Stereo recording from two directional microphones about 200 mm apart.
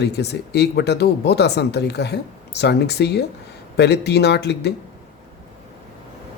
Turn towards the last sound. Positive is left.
turn(degrees=55)  # may be behind; listen again after turning